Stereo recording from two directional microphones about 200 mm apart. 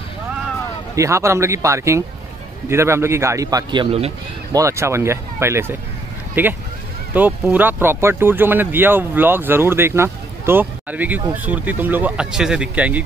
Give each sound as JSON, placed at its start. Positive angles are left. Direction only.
{"t": 0.9, "sound": "speech", "side_deg": -15}
{"t": 4.5, "sound": "speech", "side_deg": -15}